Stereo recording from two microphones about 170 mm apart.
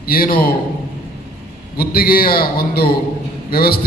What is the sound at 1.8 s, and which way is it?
A man's voice, 60° left (ahead or behind).